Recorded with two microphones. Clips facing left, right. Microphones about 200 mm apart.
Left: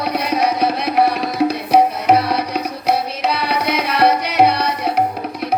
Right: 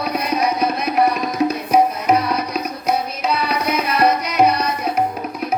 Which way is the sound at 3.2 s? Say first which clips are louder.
Left 1 dB; 65° left (ahead or behind).